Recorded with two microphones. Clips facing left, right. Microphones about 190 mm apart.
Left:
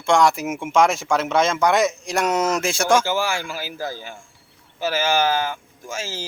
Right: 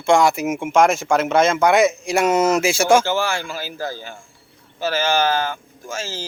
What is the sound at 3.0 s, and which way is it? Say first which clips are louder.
Speech: right 2 dB; 10° left (ahead or behind).